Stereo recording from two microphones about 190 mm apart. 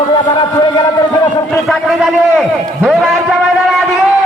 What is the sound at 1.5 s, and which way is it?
A man's voice, centre (ahead or behind).